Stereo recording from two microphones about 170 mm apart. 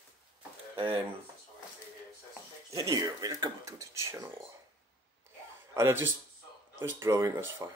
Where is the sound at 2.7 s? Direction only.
20° right (ahead or behind).